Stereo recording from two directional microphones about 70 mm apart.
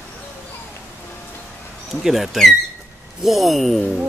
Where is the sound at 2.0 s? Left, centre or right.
Centre.